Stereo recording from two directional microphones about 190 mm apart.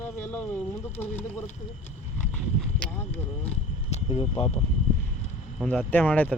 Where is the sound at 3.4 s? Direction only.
35° left (ahead or behind).